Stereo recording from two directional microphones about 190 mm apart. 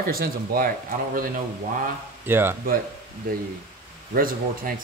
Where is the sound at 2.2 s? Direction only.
10° right (ahead or behind).